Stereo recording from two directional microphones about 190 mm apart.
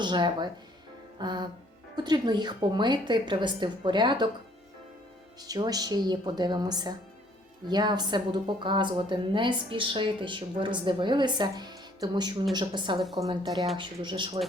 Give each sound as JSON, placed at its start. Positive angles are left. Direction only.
{"t": 0.0, "sound": "a woman's voice", "side_deg": -25}
{"t": 5.4, "sound": "a woman's voice", "side_deg": -20}
{"t": 13.0, "sound": "a woman's voice", "side_deg": 0}
{"t": 13.2, "sound": "a woman's voice", "side_deg": -20}